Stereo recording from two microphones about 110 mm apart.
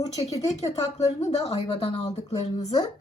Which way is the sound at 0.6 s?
85° left.